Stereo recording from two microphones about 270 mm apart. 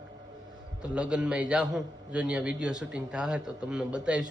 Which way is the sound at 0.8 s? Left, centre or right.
Centre.